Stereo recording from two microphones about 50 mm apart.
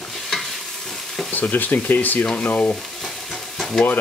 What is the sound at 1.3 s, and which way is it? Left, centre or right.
Speech, left.